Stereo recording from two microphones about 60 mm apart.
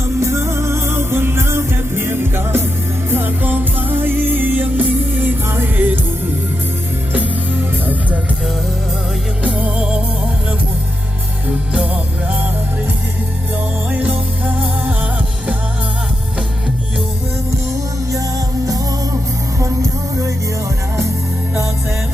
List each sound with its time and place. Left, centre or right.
0.2 s music: right
7.1 s music: right
9.4 s music: right
13.9 s music: right
18.1 s music: right
21.5 s music: right